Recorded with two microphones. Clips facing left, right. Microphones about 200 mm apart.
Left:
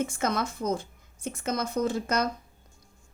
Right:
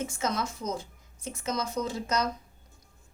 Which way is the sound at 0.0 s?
55° left (ahead or behind).